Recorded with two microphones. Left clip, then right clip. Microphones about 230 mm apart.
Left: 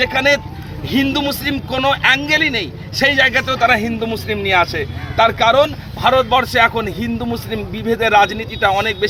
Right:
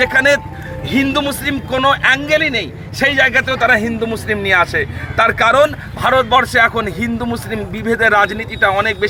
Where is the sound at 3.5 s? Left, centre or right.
Centre.